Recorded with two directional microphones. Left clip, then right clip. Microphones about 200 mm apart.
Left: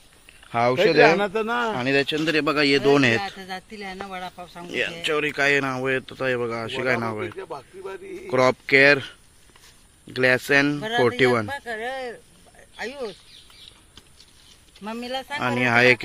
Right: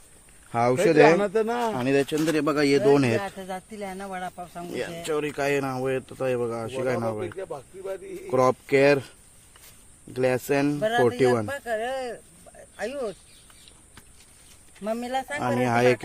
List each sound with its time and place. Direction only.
0.5 s speech: 10° right (ahead or behind)
1.1 s a man's voice: 35° left (ahead or behind)
1.8 s speech: 10° right (ahead or behind)
3.2 s speech: 40° right (ahead or behind)
4.7 s speech: 5° right (ahead or behind)
7.3 s speech: 25° left (ahead or behind)
8.3 s speech: 5° right (ahead or behind)
11.4 s speech: 40° right (ahead or behind)
14.8 s speech: 40° right (ahead or behind)
15.4 s speech: 5° right (ahead or behind)